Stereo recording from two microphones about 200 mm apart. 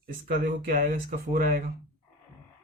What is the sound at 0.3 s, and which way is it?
Speech, 45° right (ahead or behind).